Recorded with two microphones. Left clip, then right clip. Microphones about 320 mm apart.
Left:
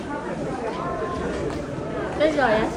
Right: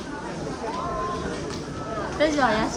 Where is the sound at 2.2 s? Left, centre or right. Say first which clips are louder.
Left 2 dB; right.